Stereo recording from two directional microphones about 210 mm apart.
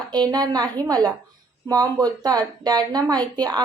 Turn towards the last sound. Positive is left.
turn(degrees=-20)  # may be behind; listen again after turning